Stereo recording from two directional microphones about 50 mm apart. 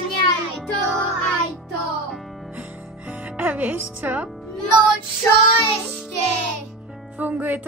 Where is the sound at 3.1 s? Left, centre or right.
Right.